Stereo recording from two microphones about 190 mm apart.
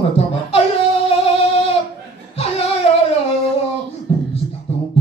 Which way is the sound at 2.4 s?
30° left (ahead or behind).